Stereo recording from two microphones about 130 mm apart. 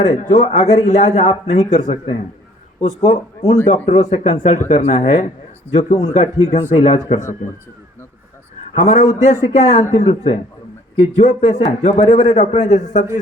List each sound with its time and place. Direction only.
0.3 s a man's voice: 50° left (ahead or behind)
8.7 s a man's voice: 50° left (ahead or behind)
12.0 s a man's voice: 45° left (ahead or behind); by 13.1 s 65° left (ahead or behind)